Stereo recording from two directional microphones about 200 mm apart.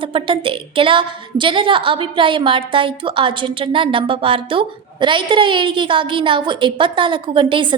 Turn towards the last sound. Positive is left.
turn(degrees=-25)  # may be behind; listen again after turning